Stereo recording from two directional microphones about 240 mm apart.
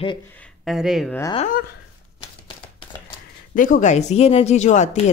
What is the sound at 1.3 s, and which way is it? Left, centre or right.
Speech, left.